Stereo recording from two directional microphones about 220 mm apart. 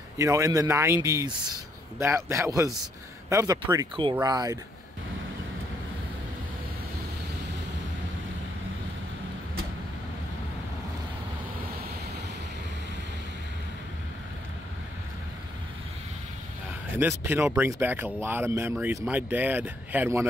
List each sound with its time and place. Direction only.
0.2 s speech: 15° right (ahead or behind)
17.2 s speech: 10° right (ahead or behind)